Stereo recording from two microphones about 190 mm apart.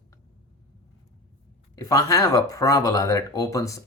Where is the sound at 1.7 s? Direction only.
15° left (ahead or behind).